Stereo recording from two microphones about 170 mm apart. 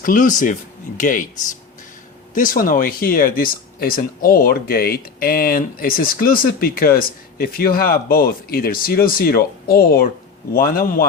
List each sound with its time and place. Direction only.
0.0 s speech: 50° left (ahead or behind)